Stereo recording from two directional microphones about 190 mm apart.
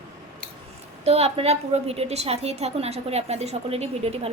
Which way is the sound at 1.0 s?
35° right (ahead or behind).